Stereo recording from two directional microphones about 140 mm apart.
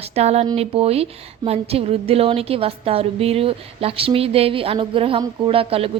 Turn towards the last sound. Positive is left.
turn(degrees=-40)  # may be behind; listen again after turning